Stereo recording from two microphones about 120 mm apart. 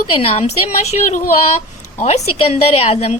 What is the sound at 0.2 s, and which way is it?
Speech, 55° left (ahead or behind).